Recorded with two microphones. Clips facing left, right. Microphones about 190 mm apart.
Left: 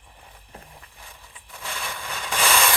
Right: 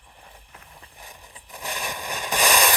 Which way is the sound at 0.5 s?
30° left (ahead or behind).